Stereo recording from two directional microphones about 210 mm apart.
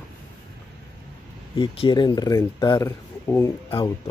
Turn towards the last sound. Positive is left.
turn(degrees=25)  # may be behind; listen again after turning